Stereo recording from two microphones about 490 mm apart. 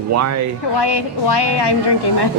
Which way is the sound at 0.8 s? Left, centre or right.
Left.